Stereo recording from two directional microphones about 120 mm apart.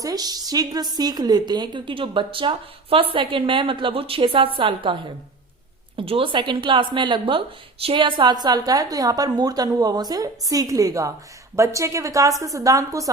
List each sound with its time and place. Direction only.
0.0 s a woman's voice: 35° right (ahead or behind)
6.0 s a woman's voice: 50° right (ahead or behind); by 13.1 s 30° right (ahead or behind)